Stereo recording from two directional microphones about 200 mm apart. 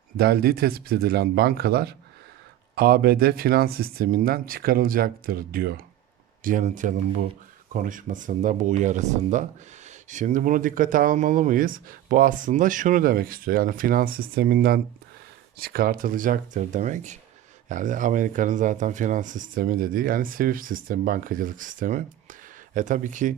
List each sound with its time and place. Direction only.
0.2 s speech: 50° right (ahead or behind)